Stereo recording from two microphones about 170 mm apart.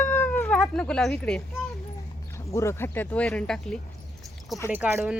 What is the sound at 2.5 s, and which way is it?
Speech, 15° left (ahead or behind).